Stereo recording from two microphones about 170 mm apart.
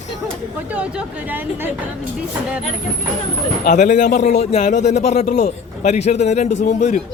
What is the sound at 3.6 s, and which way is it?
A man's voice, 45° left (ahead or behind).